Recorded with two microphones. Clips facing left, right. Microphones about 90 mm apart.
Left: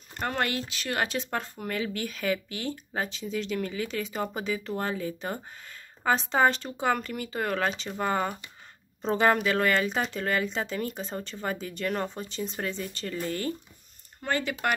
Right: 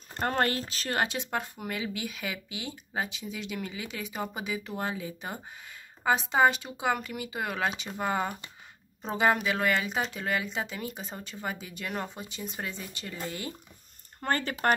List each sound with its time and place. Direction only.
0.1 s speech: 35° right (ahead or behind)
1.0 s speech: 20° right (ahead or behind)
14.2 s speech: 45° right (ahead or behind)